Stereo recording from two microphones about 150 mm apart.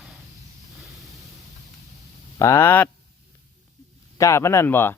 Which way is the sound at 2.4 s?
20° left (ahead or behind).